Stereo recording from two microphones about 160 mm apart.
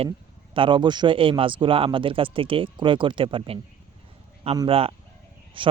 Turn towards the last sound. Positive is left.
turn(degrees=-30)  # may be behind; listen again after turning